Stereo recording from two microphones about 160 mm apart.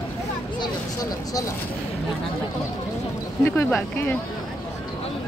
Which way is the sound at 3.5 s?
15° left (ahead or behind).